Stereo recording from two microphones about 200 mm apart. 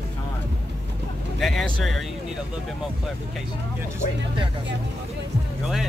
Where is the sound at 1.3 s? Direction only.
Centre (ahead or behind).